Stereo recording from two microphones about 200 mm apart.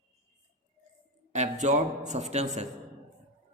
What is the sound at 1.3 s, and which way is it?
Speech, 35° right (ahead or behind).